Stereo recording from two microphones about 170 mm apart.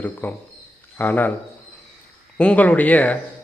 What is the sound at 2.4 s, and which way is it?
Speech, 10° left (ahead or behind).